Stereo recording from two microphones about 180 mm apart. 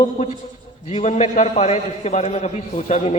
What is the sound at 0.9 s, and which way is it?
A man's voice, 40° left (ahead or behind).